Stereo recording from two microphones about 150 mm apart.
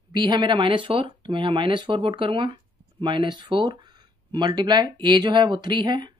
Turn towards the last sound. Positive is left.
turn(degrees=-30)  # may be behind; listen again after turning